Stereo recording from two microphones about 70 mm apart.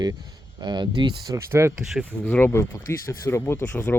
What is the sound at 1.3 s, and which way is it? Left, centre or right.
Speech, right.